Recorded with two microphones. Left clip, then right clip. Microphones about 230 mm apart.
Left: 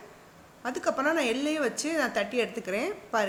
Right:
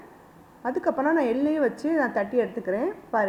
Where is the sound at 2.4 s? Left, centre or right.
Centre.